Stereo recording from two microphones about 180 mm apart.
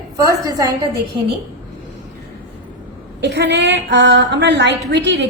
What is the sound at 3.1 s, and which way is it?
A woman's voice, 75° right (ahead or behind).